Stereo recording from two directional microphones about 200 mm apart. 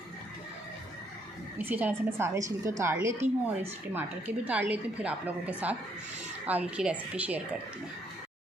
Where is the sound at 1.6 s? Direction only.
10° right (ahead or behind).